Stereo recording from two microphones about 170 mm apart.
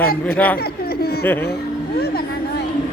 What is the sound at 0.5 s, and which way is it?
Speech, 65° left (ahead or behind).